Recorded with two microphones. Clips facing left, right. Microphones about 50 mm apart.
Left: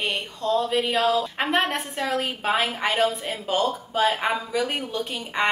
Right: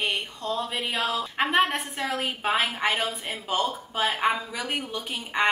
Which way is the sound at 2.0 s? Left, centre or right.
Centre.